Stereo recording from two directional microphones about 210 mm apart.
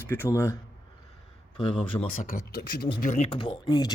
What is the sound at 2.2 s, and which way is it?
Speech, 45° left (ahead or behind).